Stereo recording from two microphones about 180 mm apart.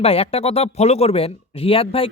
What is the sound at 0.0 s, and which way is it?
Speech, 35° left (ahead or behind).